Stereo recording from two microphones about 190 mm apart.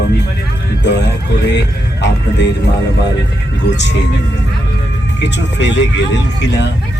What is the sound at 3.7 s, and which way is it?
Speech, 65° left (ahead or behind).